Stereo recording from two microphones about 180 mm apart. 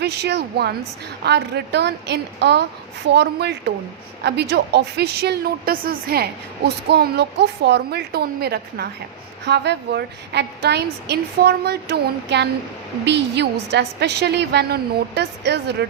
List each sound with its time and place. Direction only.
0.0 s a woman's voice: 65° right (ahead or behind)